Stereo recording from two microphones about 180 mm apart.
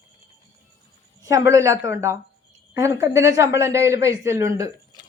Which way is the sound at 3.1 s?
15° right (ahead or behind).